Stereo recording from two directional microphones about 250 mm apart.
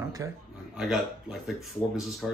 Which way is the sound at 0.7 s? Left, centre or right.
Centre.